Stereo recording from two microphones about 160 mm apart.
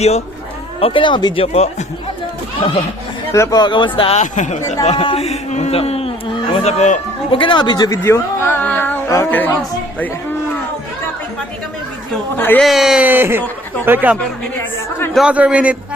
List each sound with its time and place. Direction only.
0.8 s speech: 35° left (ahead or behind)
2.6 s speech: 35° left (ahead or behind)
3.3 s speech: 20° left (ahead or behind)
4.2 s speech: 50° left (ahead or behind)
4.9 s speech: 40° left (ahead or behind)
7.3 s speech: 30° left (ahead or behind); by 9.5 s 10° left (ahead or behind)
12.1 s speech: 10° left (ahead or behind)
12.6 s speech: centre (ahead or behind)
14.6 s speech: 15° left (ahead or behind)
15.1 s speech: 5° right (ahead or behind)